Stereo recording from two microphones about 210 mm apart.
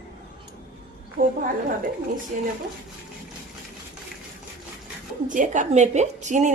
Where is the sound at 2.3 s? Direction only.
40° right (ahead or behind).